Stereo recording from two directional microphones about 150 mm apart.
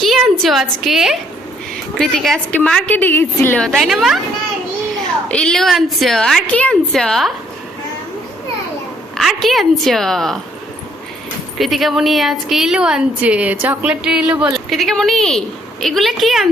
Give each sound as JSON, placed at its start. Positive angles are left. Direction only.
{"t": 0.0, "sound": "a woman's voice", "side_deg": 0}
{"t": 5.3, "sound": "a woman's voice", "side_deg": 5}
{"t": 9.1, "sound": "a woman's voice", "side_deg": 0}
{"t": 11.5, "sound": "a woman's voice", "side_deg": 0}